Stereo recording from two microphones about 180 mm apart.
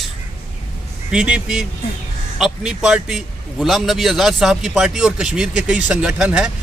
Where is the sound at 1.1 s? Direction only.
5° right (ahead or behind).